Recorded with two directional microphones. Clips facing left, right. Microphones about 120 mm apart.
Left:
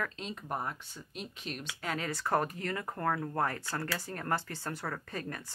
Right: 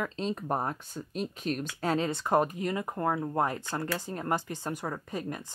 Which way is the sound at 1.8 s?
30° right (ahead or behind).